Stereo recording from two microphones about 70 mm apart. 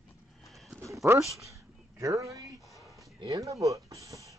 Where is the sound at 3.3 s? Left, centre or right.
Right.